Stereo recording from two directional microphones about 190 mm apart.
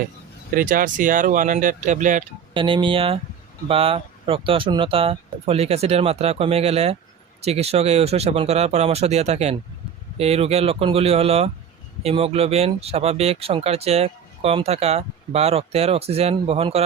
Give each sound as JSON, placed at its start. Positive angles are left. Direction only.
{"t": 0.5, "sound": "speech", "side_deg": -45}
{"t": 2.5, "sound": "speech", "side_deg": -25}